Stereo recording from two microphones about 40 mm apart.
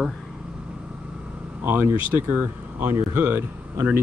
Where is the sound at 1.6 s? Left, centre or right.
Right.